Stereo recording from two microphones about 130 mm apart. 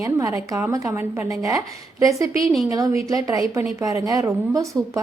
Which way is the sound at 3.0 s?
25° right (ahead or behind).